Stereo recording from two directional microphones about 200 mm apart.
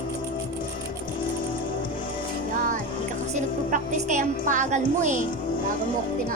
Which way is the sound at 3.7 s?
40° right (ahead or behind).